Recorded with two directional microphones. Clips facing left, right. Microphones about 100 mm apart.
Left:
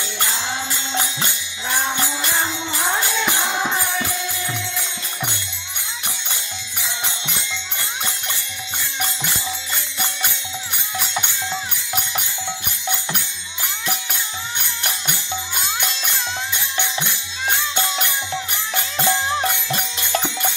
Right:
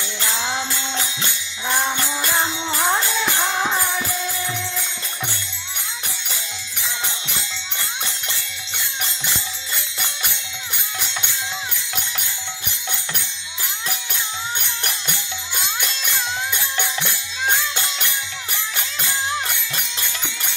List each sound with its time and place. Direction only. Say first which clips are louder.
1.9 s music: even; 5° left (ahead or behind)
18.9 s music: left 5 dB; 35° left (ahead or behind)